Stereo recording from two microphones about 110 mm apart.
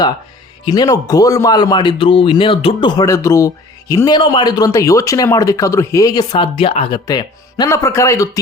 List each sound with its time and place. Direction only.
0.6 s speech: 40° left (ahead or behind); by 2.9 s 55° left (ahead or behind)
3.1 s speech: 30° left (ahead or behind)
6.4 s speech: 55° left (ahead or behind)
7.1 s speech: 40° left (ahead or behind)
7.7 s speech: 25° left (ahead or behind)